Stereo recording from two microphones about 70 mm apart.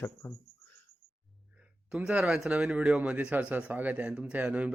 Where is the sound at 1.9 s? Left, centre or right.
Centre.